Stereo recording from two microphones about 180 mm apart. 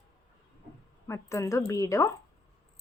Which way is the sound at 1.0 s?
15° left (ahead or behind).